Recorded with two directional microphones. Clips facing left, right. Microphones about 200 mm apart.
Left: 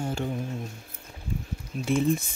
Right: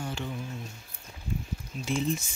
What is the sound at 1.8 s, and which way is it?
Speech, 55° left (ahead or behind).